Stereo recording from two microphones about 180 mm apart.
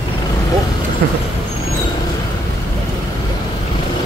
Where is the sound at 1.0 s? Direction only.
65° right (ahead or behind).